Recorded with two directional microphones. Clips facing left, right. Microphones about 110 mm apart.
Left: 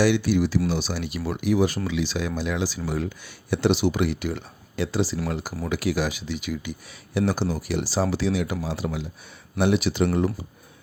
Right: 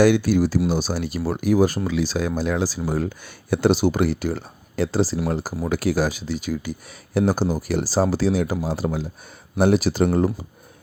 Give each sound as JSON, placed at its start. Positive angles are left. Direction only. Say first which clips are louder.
{"t": 0.0, "sound": "speech", "louder": "right 4 dB", "side_deg": -45}